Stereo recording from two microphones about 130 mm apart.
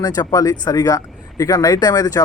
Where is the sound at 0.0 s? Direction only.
30° left (ahead or behind).